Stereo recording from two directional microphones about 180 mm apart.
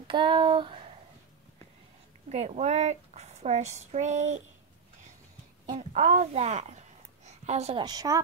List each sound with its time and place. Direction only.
0.1 s speech: 30° right (ahead or behind)
2.2 s a woman's voice: 35° right (ahead or behind)
5.7 s a woman's voice: 40° right (ahead or behind)
7.2 s a sound: 40° right (ahead or behind)
7.8 s speech: 20° right (ahead or behind)